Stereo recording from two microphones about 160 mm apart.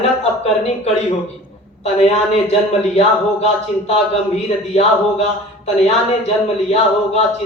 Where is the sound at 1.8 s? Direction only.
40° left (ahead or behind).